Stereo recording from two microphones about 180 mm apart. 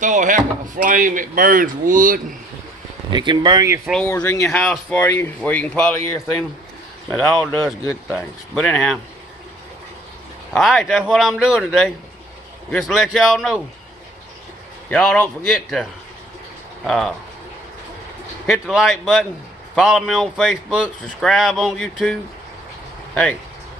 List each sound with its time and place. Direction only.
0.0 s speech: 45° right (ahead or behind)
3.1 s speech: 25° right (ahead or behind)
4.0 s speech: 10° left (ahead or behind)
10.5 s speech: centre (ahead or behind)
14.8 s speech: 5° left (ahead or behind)
18.4 s speech: centre (ahead or behind)